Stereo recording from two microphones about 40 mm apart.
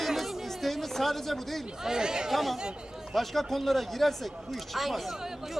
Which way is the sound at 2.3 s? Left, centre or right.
Centre.